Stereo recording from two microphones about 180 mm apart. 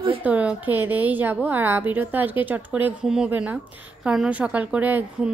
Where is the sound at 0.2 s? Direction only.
10° right (ahead or behind).